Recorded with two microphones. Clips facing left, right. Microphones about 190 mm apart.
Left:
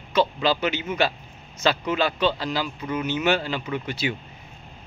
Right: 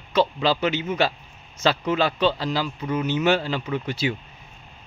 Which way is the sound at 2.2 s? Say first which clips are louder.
Right 1 dB; 35° right (ahead or behind).